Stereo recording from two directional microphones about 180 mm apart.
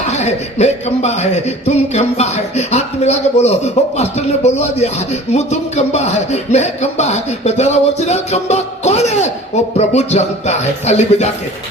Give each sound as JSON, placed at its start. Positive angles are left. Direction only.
{"t": 0.0, "sound": "speech", "side_deg": 40}